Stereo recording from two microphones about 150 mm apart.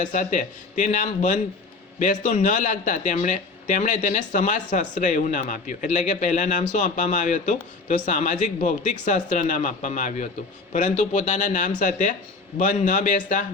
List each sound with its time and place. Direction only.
0.0 s speech: 55° left (ahead or behind)